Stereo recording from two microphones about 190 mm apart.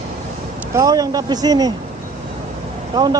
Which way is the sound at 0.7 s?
20° right (ahead or behind).